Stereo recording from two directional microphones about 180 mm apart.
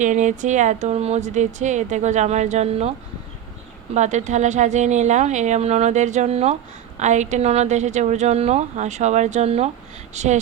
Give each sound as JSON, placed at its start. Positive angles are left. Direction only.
{"t": 0.0, "sound": "speech", "side_deg": -45}
{"t": 3.9, "sound": "speech", "side_deg": -40}